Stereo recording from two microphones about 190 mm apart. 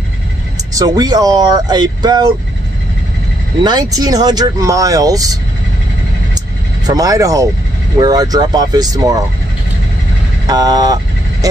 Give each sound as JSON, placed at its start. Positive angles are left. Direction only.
{"t": 0.7, "sound": "speech", "side_deg": -20}
{"t": 3.6, "sound": "speech", "side_deg": -20}
{"t": 6.9, "sound": "speech", "side_deg": -20}
{"t": 10.4, "sound": "speech", "side_deg": -20}